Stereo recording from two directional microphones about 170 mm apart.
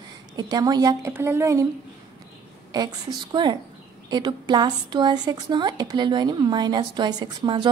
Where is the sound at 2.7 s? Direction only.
25° right (ahead or behind).